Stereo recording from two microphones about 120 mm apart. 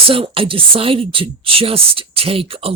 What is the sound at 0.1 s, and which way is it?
Speech, 50° right (ahead or behind).